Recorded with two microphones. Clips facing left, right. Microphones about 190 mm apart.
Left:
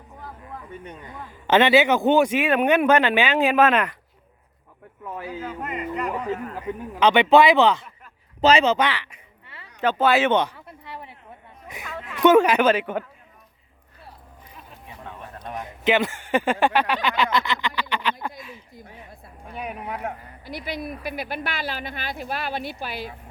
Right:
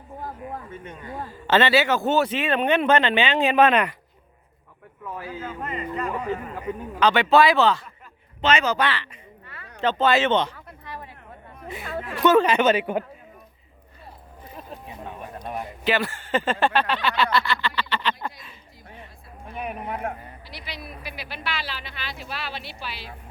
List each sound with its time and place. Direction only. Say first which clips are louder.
0.2 s a sound: right 5 dB; 45° right (ahead or behind)
1.3 s a man's voice: left 3 dB; 15° left (ahead or behind)
5.4 s speech: even; centre (ahead or behind)
7.0 s speech: left 2 dB; 20° left (ahead or behind)
8.4 s speech: left 5 dB; 35° left (ahead or behind)
8.6 s a man's voice: left 3 dB; 20° left (ahead or behind)
12.2 s a man's voice: left 2 dB; 15° left (ahead or behind)
12.6 s speech: even; centre (ahead or behind)
14.8 s a sound: left 1 dB; 15° right (ahead or behind)
15.8 s speech: left 4 dB; 20° left (ahead or behind)
20.4 s a woman's voice: left 8 dB; 50° left (ahead or behind)